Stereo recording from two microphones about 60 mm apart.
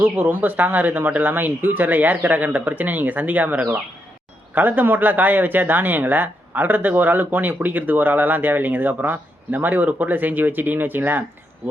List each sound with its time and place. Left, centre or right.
0.0 s speech: right